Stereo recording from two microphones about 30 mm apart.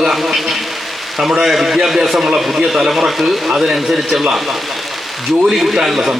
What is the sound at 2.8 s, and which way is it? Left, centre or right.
Speech, centre.